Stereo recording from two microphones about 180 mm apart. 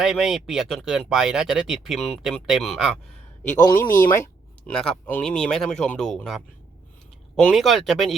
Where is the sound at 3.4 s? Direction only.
40° left (ahead or behind).